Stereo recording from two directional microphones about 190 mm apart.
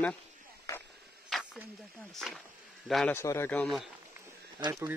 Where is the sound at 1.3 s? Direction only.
Centre (ahead or behind).